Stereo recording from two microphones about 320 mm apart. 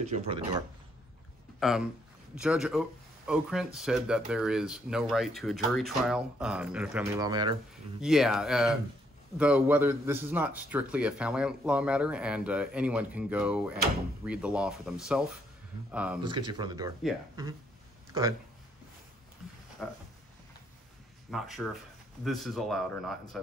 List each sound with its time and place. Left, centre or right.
0.0 s speech: centre
1.6 s speech: centre
8.0 s speech: centre
19.8 s speech: centre
21.3 s speech: centre